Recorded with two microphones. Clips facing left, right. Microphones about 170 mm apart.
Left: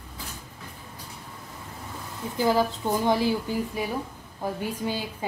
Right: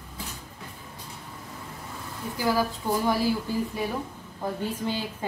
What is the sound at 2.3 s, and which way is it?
A woman's voice, 20° left (ahead or behind).